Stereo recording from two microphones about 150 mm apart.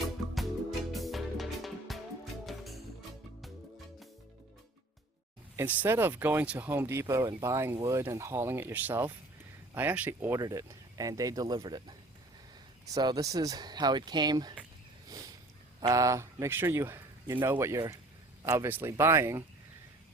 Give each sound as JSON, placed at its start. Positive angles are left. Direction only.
{"t": 0.9, "sound": "music", "side_deg": 0}
{"t": 5.5, "sound": "a man's voice", "side_deg": -10}
{"t": 15.8, "sound": "a man's voice", "side_deg": -20}